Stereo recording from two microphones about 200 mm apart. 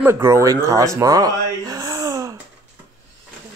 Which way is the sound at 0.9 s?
15° right (ahead or behind).